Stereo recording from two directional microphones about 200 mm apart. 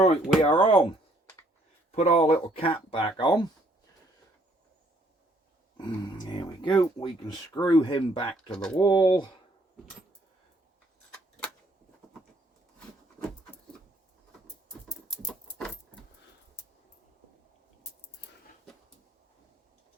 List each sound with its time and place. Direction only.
0.0 s speech: 25° left (ahead or behind)
2.0 s speech: 35° left (ahead or behind)
5.7 s speech: 20° left (ahead or behind)
15.1 s rodents: 5° left (ahead or behind)